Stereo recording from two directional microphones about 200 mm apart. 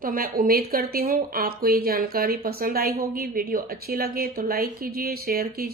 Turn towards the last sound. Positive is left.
turn(degrees=-50)  # may be behind; listen again after turning